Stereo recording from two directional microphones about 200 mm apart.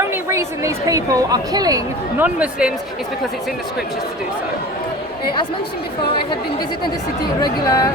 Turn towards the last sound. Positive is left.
turn(degrees=15)  # may be behind; listen again after turning